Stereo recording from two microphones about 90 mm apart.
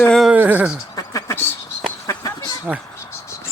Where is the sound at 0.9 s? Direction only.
40° left (ahead or behind).